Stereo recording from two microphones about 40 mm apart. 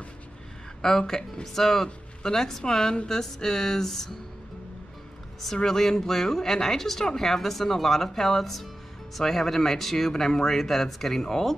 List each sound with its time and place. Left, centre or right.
0.8 s speech: centre
5.4 s speech: centre